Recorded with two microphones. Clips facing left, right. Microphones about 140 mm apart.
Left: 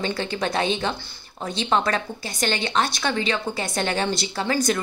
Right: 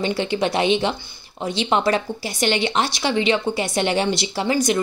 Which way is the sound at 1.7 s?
25° right (ahead or behind).